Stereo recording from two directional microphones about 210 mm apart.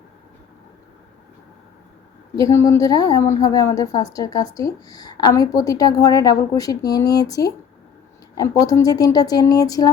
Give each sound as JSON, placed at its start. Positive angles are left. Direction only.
{"t": 2.3, "sound": "a woman's voice", "side_deg": 15}